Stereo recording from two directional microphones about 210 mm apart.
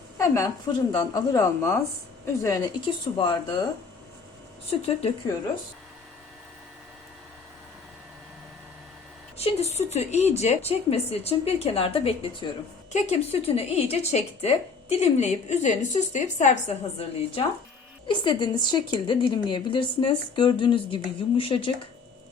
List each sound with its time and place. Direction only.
0.2 s a woman's voice: 15° left (ahead or behind)
4.7 s a woman's voice: 25° left (ahead or behind)
9.4 s a woman's voice: 30° left (ahead or behind)